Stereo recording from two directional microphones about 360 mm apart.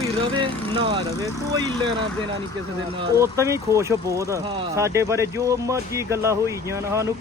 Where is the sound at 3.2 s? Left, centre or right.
Centre.